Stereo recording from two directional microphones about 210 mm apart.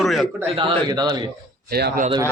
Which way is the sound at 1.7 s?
50° right (ahead or behind).